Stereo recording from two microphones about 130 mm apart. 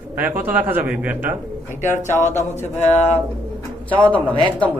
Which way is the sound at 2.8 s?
60° left (ahead or behind).